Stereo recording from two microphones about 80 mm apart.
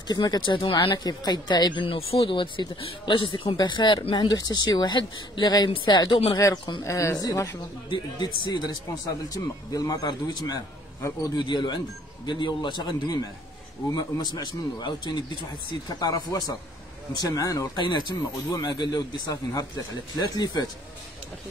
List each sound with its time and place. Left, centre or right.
0.1 s speech: left
0.9 s speech: left
4.4 s a woman's voice: left
6.8 s speech: left
7.9 s a woman's voice: left
9.3 s a woman's voice: left
11.0 s speech: left
11.3 s a woman's voice: left
15.9 s a woman's voice: left
17.7 s speech: left
18.5 s a woman's voice: left